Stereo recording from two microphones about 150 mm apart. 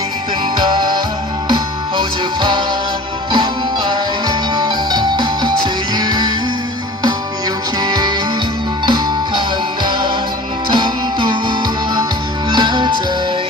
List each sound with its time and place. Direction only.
0.5 s music: 30° right (ahead or behind)
7.8 s music: 25° right (ahead or behind)
10.7 s music: 30° right (ahead or behind)